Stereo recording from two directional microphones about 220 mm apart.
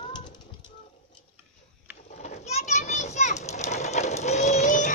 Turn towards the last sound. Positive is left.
turn(degrees=30)  # may be behind; listen again after turning